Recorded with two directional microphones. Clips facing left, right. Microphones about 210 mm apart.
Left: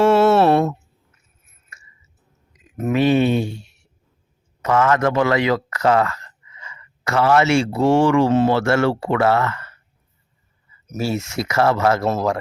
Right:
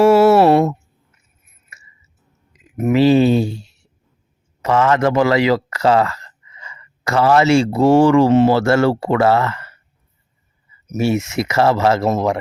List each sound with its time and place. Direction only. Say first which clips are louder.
0.0 s a sound: right 4 dB; 10° right (ahead or behind)
2.9 s speech: right 4 dB; 30° right (ahead or behind)
8.3 s speech: right 4 dB; 25° right (ahead or behind)
8.5 s speech: right 3 dB; 35° right (ahead or behind)
11.0 s speech: right 5 dB; 20° right (ahead or behind)
12.0 s speech: right 3 dB; 15° right (ahead or behind)